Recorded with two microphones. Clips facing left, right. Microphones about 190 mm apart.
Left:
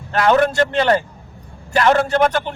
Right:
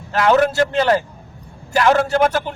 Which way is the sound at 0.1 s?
5° right (ahead or behind).